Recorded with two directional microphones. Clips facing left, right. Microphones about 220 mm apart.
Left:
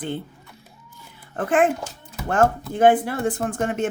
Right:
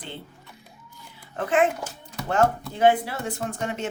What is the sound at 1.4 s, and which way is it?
Speech, 50° left (ahead or behind).